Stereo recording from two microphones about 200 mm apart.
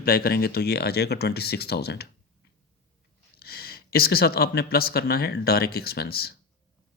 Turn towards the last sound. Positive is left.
turn(degrees=50)  # may be behind; listen again after turning